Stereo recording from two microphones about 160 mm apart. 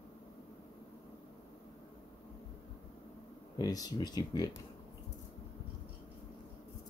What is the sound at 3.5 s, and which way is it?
Speech, 25° left (ahead or behind).